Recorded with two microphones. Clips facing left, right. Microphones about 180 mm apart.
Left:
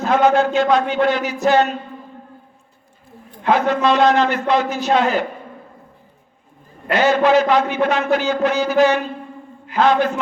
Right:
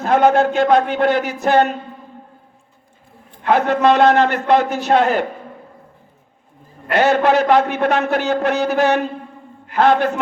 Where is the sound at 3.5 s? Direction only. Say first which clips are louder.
Right 2 dB; 60° right (ahead or behind).